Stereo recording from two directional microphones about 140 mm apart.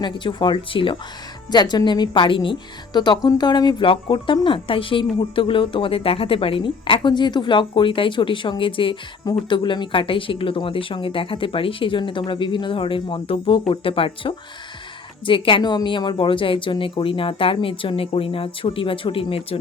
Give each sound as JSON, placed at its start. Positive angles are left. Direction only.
{"t": 0.0, "sound": "speech", "side_deg": 35}